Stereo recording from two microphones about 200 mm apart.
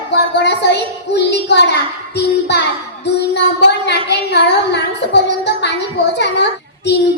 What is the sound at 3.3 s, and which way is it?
A woman's voice, 60° left (ahead or behind).